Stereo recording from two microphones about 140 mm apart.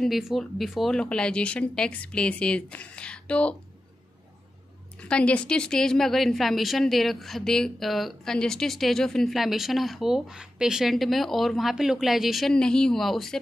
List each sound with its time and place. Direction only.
0.0 s speech: centre (ahead or behind)
4.9 s a woman's voice: 5° left (ahead or behind)